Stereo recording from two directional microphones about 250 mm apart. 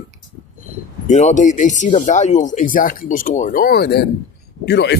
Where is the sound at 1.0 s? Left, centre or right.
Left.